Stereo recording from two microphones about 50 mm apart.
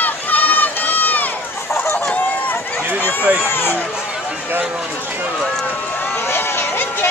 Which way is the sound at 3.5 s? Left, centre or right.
Left.